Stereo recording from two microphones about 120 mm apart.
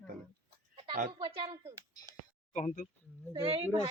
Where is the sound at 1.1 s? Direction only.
40° right (ahead or behind).